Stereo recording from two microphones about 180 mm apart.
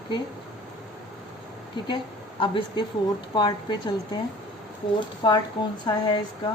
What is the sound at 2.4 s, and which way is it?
A woman's voice, 30° left (ahead or behind).